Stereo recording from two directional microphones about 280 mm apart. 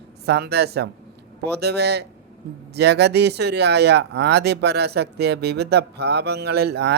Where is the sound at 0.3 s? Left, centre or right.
Right.